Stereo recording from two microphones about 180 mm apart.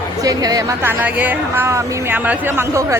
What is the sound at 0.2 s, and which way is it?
Speech, 20° right (ahead or behind).